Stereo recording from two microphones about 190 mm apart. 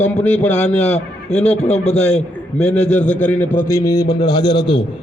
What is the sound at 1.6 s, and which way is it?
Speech, 35° left (ahead or behind).